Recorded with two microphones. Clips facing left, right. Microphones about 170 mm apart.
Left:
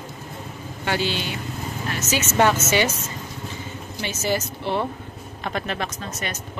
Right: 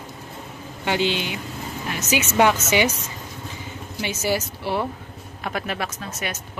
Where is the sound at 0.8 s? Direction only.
15° right (ahead or behind).